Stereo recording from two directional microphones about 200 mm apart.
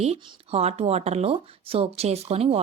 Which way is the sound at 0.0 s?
25° right (ahead or behind).